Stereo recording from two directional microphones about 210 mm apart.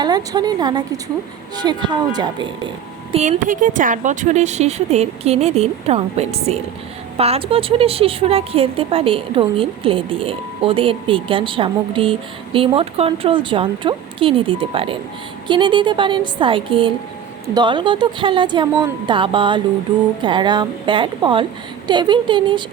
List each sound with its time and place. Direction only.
0.0 s a woman's voice: 20° right (ahead or behind)
3.2 s a woman's voice: 40° right (ahead or behind); by 22.6 s 20° right (ahead or behind)